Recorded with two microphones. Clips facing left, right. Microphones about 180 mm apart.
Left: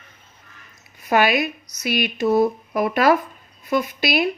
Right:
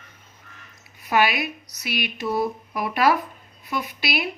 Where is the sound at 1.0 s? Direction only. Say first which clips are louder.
Left 3 dB; 45° left (ahead or behind).